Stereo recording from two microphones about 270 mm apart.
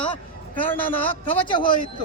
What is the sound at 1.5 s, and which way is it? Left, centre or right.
Speech, centre.